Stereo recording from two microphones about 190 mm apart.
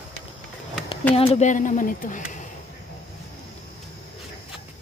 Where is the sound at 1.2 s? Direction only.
35° left (ahead or behind).